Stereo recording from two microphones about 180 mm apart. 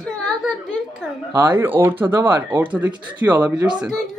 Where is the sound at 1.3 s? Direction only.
10° right (ahead or behind).